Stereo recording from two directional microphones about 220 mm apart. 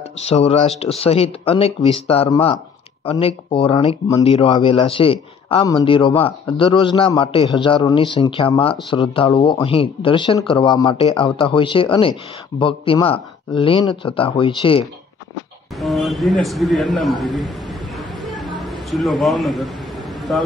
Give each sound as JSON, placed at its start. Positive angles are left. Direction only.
{"t": 0.3, "sound": "speech", "side_deg": 30}
{"t": 15.8, "sound": "a sound", "side_deg": 0}
{"t": 18.6, "sound": "a man's voice", "side_deg": 0}